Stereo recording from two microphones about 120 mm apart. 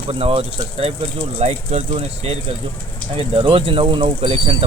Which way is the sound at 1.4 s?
70° right (ahead or behind).